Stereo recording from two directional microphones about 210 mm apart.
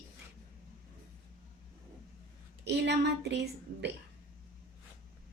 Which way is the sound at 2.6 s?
55° right (ahead or behind).